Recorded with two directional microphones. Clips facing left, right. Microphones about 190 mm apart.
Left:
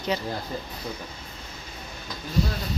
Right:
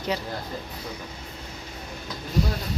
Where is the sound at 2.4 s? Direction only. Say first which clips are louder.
Even; 15° right (ahead or behind).